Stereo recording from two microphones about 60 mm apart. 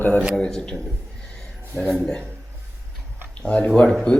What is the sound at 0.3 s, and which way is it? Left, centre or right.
Speech, centre.